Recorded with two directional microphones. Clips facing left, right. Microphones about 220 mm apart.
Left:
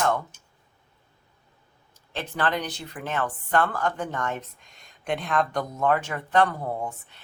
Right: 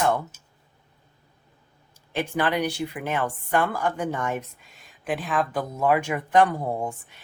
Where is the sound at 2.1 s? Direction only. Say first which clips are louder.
Right 3 dB; 15° right (ahead or behind).